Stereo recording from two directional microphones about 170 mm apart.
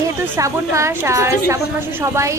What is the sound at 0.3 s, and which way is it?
A woman's voice, 20° right (ahead or behind).